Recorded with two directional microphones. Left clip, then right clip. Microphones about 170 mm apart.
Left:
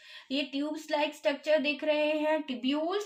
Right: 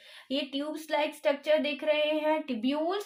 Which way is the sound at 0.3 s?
35° right (ahead or behind).